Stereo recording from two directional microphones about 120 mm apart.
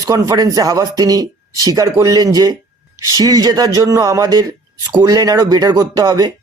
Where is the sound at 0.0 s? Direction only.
30° right (ahead or behind).